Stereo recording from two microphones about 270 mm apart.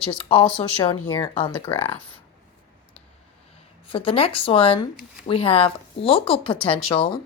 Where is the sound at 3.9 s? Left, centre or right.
Centre.